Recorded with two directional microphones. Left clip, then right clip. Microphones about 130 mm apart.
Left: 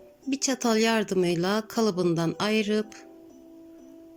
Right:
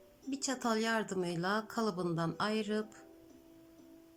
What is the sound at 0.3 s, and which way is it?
Speech, 20° left (ahead or behind).